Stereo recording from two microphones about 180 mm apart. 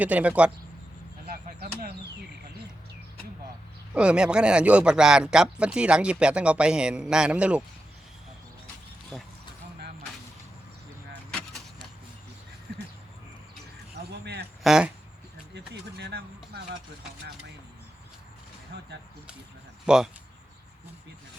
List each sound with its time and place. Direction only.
0.0 s speech: 10° right (ahead or behind)
3.9 s speech: 5° right (ahead or behind)
11.1 s vehicle: 5° left (ahead or behind)
14.6 s speech: 5° right (ahead or behind)
15.5 s a sound: 70° right (ahead or behind)
18.7 s a sound: 70° right (ahead or behind)
19.8 s speech: 5° right (ahead or behind)